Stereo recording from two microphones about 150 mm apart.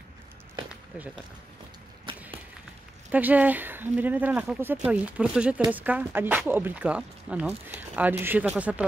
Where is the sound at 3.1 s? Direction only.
10° right (ahead or behind).